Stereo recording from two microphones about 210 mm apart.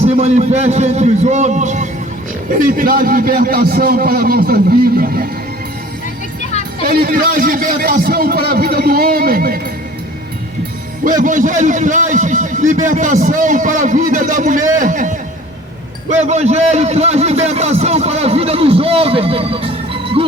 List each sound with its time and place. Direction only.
0.0 s a man's voice: 30° right (ahead or behind)
6.9 s a man's voice: 45° right (ahead or behind)
11.0 s a man's voice: 40° right (ahead or behind)